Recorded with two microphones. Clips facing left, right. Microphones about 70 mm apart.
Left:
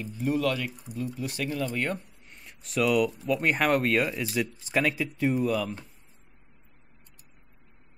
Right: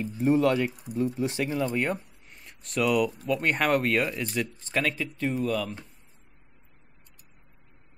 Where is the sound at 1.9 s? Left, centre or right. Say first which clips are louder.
Right 2 dB; centre.